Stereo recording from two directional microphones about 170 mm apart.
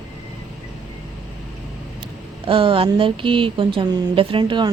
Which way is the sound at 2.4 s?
30° right (ahead or behind).